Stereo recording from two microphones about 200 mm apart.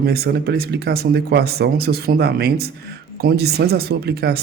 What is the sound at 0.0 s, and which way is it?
Speech, 50° right (ahead or behind).